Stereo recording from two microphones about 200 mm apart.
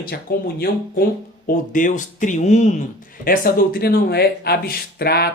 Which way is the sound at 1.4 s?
40° left (ahead or behind).